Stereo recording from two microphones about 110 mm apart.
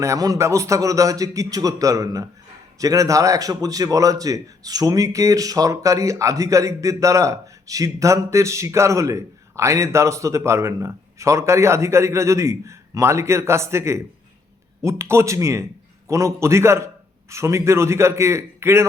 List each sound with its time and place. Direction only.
0.0 s a man's voice: 30° right (ahead or behind)